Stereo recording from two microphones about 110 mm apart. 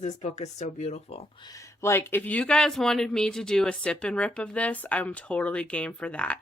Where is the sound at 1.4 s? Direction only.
30° left (ahead or behind).